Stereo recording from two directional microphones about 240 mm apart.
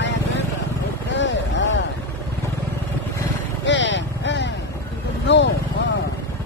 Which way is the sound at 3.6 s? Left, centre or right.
Left.